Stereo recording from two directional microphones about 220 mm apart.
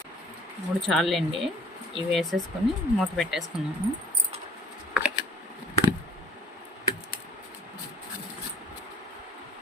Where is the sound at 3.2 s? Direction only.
Centre (ahead or behind).